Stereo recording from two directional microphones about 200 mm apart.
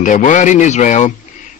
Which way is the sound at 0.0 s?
40° left (ahead or behind).